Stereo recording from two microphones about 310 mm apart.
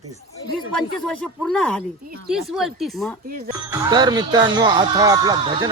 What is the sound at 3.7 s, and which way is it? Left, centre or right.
Speech, centre.